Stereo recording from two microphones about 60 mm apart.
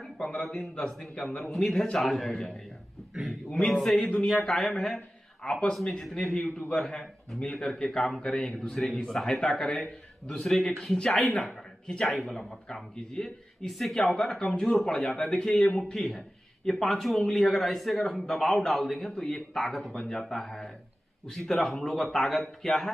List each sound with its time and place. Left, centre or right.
0.2 s a man's voice: centre
5.8 s speech: centre
6.2 s a man's voice: centre